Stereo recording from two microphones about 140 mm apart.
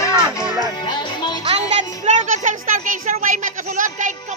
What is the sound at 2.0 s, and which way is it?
A child's voice, 60° right (ahead or behind).